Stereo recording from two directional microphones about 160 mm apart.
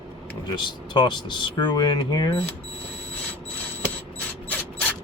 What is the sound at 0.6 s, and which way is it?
Speech, 30° left (ahead or behind).